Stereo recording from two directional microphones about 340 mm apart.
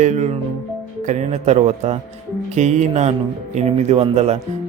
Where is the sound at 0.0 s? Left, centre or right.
Right.